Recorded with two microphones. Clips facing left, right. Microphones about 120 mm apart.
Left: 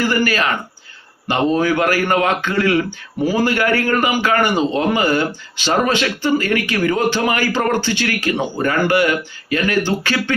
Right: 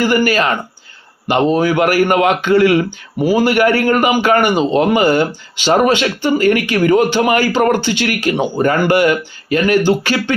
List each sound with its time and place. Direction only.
0.0 s speech: 25° right (ahead or behind)